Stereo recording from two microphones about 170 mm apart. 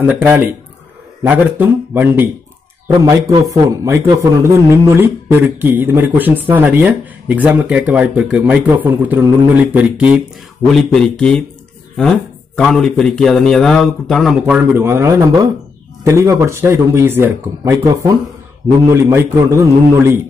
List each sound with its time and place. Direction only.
0.0 s speech: 10° right (ahead or behind)
2.9 s a man's voice: 25° right (ahead or behind); by 10.2 s 5° right (ahead or behind)
10.7 s a man's voice: 5° left (ahead or behind)
12.5 s a man's voice: 5° left (ahead or behind); by 20.2 s 15° right (ahead or behind)